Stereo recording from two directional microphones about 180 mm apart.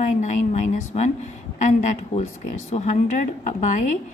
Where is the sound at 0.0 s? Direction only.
40° left (ahead or behind).